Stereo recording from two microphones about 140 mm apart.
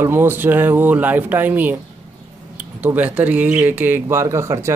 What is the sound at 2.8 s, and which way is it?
Speech, 10° right (ahead or behind).